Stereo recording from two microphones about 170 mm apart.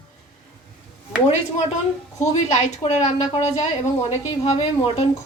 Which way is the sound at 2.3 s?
40° left (ahead or behind).